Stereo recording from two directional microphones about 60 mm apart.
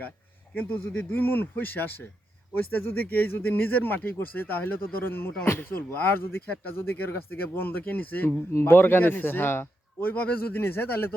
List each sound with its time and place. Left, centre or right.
0.5 s speech: left
8.5 s speech: left